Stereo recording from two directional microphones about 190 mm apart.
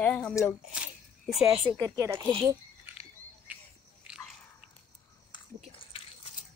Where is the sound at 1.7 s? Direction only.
15° right (ahead or behind).